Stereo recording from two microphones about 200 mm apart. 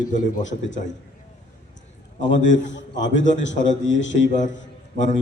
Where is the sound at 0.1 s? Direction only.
40° left (ahead or behind).